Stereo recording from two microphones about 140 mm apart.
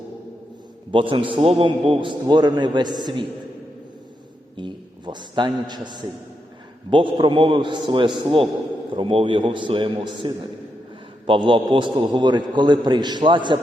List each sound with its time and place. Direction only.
0.9 s a man's voice: 35° right (ahead or behind)
4.5 s a man's voice: 35° right (ahead or behind)